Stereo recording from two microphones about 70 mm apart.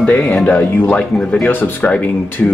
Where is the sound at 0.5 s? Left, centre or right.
Centre.